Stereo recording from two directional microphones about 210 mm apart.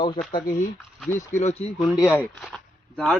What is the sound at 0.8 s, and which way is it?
Speech, centre (ahead or behind).